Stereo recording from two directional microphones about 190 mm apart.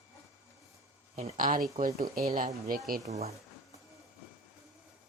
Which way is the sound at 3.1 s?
35° right (ahead or behind).